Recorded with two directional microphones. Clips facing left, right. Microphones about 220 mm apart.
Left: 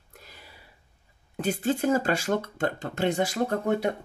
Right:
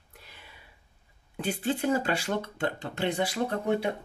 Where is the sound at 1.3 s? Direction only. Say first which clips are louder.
Left 3 dB; 45° left (ahead or behind).